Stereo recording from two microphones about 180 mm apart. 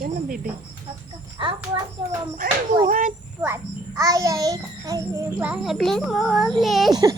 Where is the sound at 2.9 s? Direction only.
45° right (ahead or behind).